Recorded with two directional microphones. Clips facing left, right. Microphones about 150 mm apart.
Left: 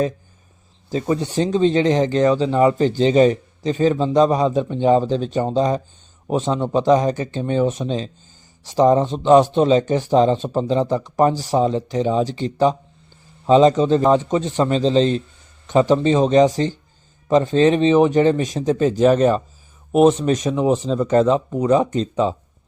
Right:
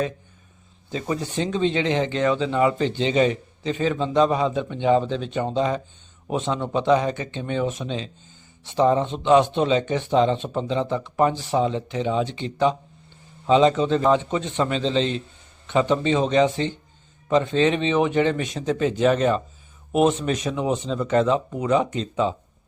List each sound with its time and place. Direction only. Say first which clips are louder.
1.0 s speech: left 5 dB; 30° left (ahead or behind)